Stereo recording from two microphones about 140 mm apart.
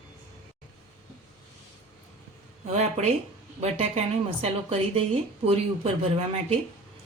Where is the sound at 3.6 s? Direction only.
45° right (ahead or behind).